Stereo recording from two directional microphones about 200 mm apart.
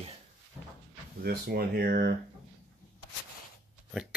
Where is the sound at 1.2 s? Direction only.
50° right (ahead or behind).